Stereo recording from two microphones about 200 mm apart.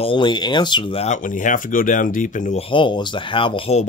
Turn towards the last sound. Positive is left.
turn(degrees=30)  # may be behind; listen again after turning